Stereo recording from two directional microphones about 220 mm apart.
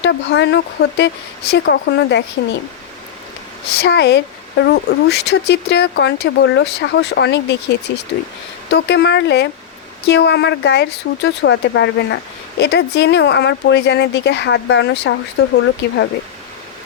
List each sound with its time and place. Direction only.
0.0 s speech: 55° left (ahead or behind)
3.8 s speech: 50° left (ahead or behind)